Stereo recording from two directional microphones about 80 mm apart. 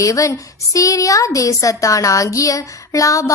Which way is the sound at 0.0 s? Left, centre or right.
Left.